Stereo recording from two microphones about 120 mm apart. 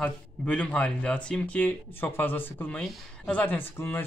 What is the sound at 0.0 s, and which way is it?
Speech, 10° left (ahead or behind).